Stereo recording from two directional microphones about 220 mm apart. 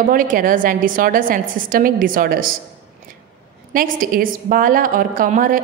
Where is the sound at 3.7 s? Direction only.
40° right (ahead or behind).